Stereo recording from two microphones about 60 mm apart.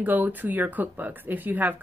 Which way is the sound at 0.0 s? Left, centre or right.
Right.